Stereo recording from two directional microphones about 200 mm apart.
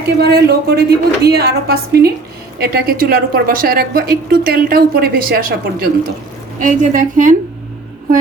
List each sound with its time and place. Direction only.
0.2 s a woman's voice: 55° right (ahead or behind)